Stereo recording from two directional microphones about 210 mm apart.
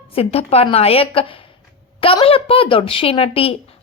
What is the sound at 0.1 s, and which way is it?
A woman's voice, 30° left (ahead or behind).